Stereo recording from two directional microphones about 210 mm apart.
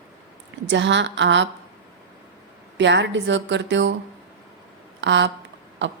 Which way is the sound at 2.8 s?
60° right (ahead or behind).